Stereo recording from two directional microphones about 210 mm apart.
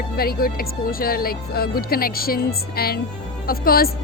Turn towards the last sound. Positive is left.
turn(degrees=45)  # may be behind; listen again after turning